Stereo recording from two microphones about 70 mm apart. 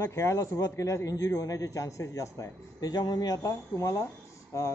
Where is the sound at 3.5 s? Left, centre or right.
Left.